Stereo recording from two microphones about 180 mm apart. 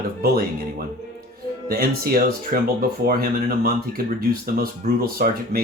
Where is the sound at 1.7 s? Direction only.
55° right (ahead or behind).